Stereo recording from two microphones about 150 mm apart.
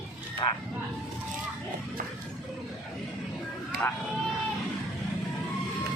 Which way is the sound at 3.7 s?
90° right.